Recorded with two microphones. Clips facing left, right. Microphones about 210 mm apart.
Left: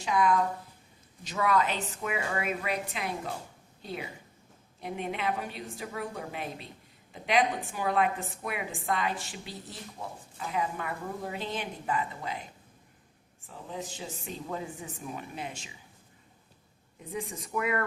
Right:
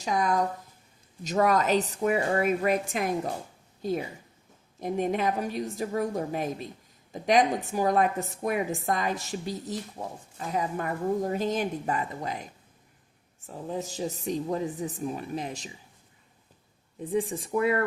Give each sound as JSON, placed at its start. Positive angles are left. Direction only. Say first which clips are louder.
{"t": 0.0, "sound": "a woman's voice", "louder": "even", "side_deg": -40}
{"t": 4.8, "sound": "a woman's voice", "louder": "right 7 dB", "side_deg": -40}
{"t": 13.5, "sound": "a woman's voice", "louder": "right 6 dB", "side_deg": -40}
{"t": 17.0, "sound": "a woman's voice", "louder": "right 9 dB", "side_deg": -35}